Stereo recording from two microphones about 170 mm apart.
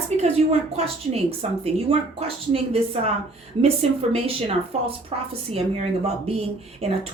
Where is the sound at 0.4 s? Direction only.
40° right (ahead or behind).